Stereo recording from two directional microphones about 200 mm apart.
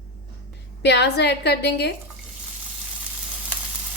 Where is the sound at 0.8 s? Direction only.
55° left (ahead or behind).